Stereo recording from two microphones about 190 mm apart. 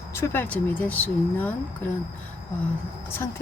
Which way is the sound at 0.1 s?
10° left (ahead or behind).